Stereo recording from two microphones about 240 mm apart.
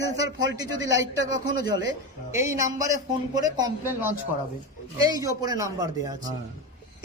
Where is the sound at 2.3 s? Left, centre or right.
Centre.